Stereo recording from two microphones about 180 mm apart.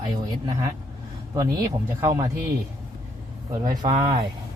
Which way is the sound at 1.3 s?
20° right (ahead or behind).